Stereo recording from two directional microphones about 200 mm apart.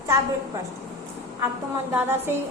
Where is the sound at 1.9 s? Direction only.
10° right (ahead or behind).